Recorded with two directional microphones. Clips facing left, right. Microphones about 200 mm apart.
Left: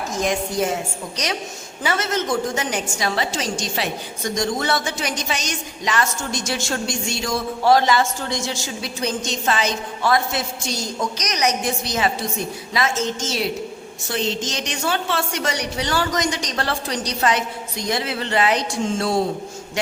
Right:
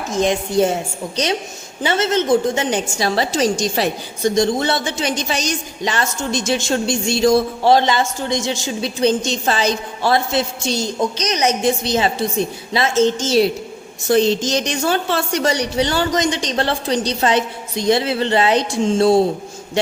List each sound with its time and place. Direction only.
0.1 s a woman's voice: 25° right (ahead or behind)